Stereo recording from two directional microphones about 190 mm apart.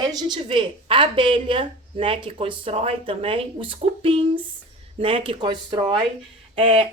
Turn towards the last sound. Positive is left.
turn(degrees=-25)  # may be behind; listen again after turning